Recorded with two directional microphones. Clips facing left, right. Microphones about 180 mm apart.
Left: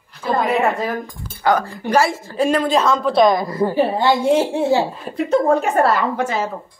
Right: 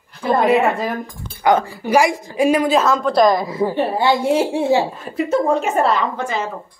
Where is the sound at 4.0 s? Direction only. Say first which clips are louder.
Right 1 dB; 10° right (ahead or behind).